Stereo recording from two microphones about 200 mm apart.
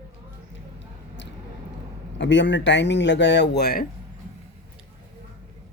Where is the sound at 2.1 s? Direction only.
65° left (ahead or behind).